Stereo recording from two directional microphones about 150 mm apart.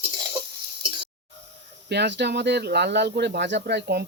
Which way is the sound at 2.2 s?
90° right.